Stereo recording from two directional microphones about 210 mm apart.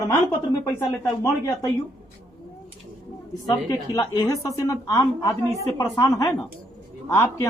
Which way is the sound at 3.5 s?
15° left (ahead or behind).